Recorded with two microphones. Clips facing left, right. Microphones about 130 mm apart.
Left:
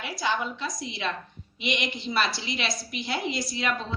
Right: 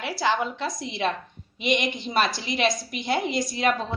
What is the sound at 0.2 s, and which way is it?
Speech, 70° right (ahead or behind).